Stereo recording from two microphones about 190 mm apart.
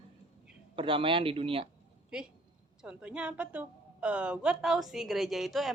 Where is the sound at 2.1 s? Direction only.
5° right (ahead or behind).